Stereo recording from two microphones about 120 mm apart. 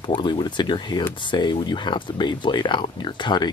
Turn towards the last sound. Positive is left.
turn(degrees=40)  # may be behind; listen again after turning